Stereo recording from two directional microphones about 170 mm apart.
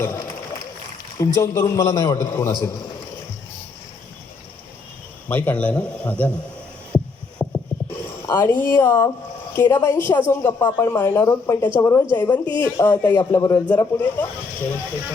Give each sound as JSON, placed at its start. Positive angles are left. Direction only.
{"t": 0.0, "sound": "speech", "side_deg": 15}
{"t": 1.4, "sound": "a man's voice", "side_deg": 20}
{"t": 5.3, "sound": "speech", "side_deg": 10}
{"t": 6.9, "sound": "a sound", "side_deg": 5}
{"t": 8.3, "sound": "speech", "side_deg": 15}